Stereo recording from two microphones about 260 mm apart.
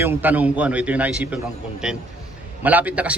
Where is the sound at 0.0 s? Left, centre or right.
Centre.